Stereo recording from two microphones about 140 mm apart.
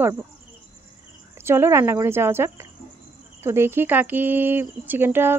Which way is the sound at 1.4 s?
20° right (ahead or behind).